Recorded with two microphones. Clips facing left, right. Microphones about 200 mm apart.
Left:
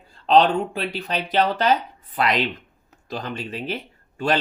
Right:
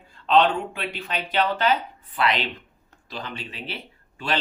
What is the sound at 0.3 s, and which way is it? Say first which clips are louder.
Speech: left 3 dB; 40° left (ahead or behind).